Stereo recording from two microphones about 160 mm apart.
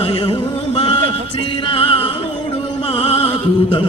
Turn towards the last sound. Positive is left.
turn(degrees=40)  # may be behind; listen again after turning